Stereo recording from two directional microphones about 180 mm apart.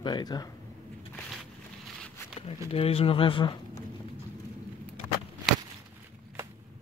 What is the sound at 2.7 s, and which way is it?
Speech, 30° left (ahead or behind).